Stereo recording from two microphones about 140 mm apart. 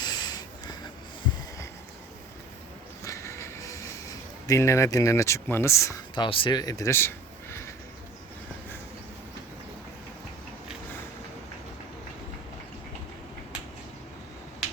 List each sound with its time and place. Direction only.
0.0 s snort: 30° left (ahead or behind)
3.0 s train: 20° left (ahead or behind)
4.1 s speech: 25° left (ahead or behind)
6.1 s speech: 35° left (ahead or behind); by 7.1 s 20° left (ahead or behind)